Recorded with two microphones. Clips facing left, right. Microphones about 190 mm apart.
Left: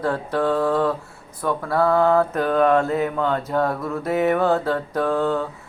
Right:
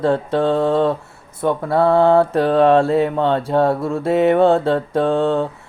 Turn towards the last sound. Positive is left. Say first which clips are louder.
# right 4 dB
turn(degrees=-25)  # may be behind; listen again after turning